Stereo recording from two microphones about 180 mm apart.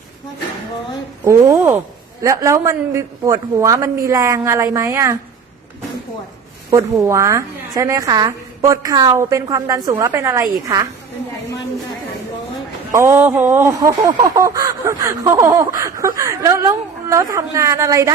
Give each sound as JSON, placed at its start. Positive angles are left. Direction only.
{"t": 1.2, "sound": "a woman's voice", "side_deg": -15}
{"t": 6.7, "sound": "a woman's voice", "side_deg": -15}
{"t": 12.9, "sound": "a woman's voice", "side_deg": -15}